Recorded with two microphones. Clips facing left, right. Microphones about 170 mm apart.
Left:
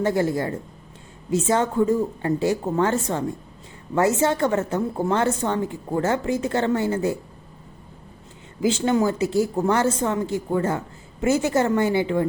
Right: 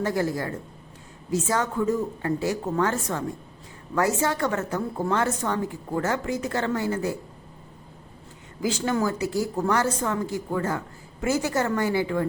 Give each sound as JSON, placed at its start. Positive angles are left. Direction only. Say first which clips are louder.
{"t": 0.0, "sound": "speech", "louder": "left 4 dB", "side_deg": 25}
{"t": 8.6, "sound": "speech", "louder": "left 5 dB", "side_deg": 25}